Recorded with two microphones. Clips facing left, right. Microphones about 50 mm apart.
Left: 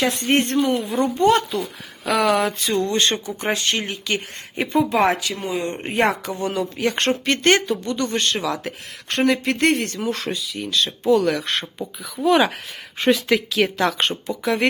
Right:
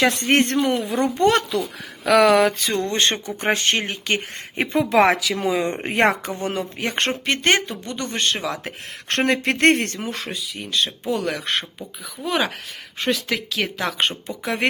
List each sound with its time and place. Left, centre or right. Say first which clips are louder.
0.0 s speech: right 2 dB; right
0.8 s speech: even; right
2.6 s speech: left 1 dB; right
4.9 s speech: right 2 dB; right
6.4 s speech: left 6 dB; right
9.2 s speech: right 1 dB; right
10.2 s speech: left 3 dB; centre
10.7 s speech: left 1 dB; right
11.2 s speech: left 5 dB; centre
12.1 s speech: left 6 dB; centre
14.3 s speech: left 3 dB; right